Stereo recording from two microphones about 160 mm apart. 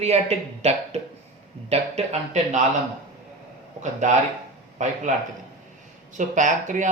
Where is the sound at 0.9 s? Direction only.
40° right (ahead or behind).